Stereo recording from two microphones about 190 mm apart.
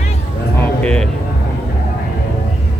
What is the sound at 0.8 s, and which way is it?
Speech, 5° left (ahead or behind).